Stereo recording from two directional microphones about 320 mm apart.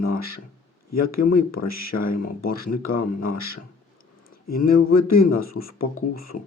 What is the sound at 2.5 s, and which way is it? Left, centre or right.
Speech, left.